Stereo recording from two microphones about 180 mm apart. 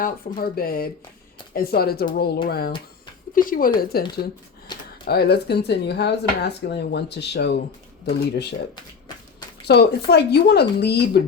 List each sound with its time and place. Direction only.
0.0 s speech: 55° left (ahead or behind)
5.0 s speech: 60° left (ahead or behind)
9.6 s speech: 65° left (ahead or behind)